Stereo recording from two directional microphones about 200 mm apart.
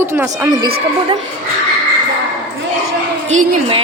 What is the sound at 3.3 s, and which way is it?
Speech, 25° right (ahead or behind).